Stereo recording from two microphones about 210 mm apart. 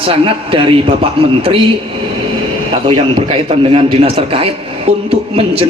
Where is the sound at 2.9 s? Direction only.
25° right (ahead or behind).